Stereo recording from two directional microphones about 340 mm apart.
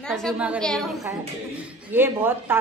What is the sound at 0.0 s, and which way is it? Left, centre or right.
Speech, centre.